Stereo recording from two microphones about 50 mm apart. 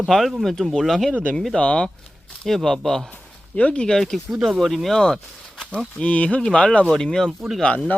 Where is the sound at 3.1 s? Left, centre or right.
Left.